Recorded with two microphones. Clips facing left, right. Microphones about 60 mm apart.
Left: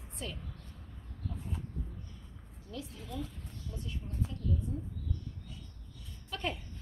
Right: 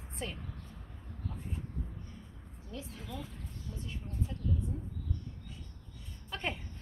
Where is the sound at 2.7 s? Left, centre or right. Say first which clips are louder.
Left 1 dB; right.